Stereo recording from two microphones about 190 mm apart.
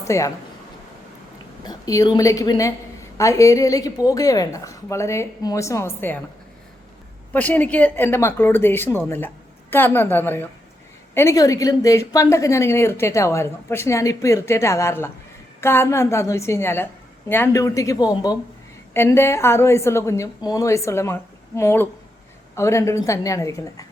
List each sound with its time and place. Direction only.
0.0 s speech: 15° left (ahead or behind)
1.6 s a woman's voice: 20° left (ahead or behind)
7.3 s a woman's voice: 10° left (ahead or behind)